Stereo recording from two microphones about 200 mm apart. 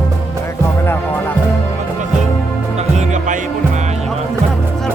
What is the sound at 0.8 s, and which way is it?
Music, 10° left (ahead or behind).